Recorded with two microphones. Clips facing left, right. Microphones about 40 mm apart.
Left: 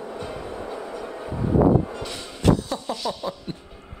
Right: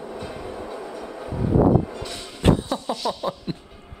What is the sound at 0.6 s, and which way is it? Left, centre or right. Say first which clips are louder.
Music: left 1 dB; centre.